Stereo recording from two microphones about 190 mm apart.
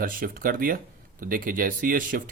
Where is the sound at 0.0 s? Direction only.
50° right (ahead or behind).